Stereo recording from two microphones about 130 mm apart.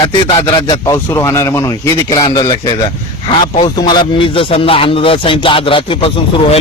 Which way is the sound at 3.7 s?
35° left (ahead or behind).